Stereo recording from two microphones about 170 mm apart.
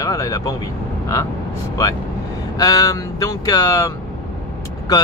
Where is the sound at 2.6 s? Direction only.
20° left (ahead or behind).